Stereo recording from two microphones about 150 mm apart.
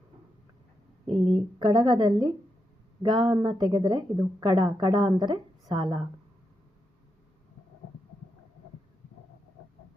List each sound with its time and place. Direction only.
1.0 s a woman's voice: 30° right (ahead or behind)